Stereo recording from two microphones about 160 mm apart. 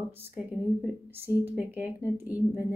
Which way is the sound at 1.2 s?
10° right (ahead or behind).